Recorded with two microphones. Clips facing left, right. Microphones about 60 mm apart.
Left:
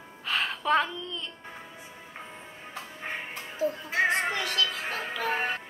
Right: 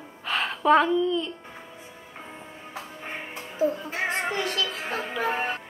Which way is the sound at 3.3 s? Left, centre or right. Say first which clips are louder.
Right 6 dB; right.